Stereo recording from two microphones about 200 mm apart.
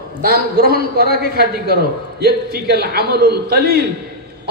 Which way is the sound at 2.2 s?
50° right (ahead or behind).